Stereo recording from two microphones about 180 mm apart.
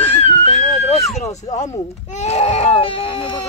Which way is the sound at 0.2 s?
35° left (ahead or behind).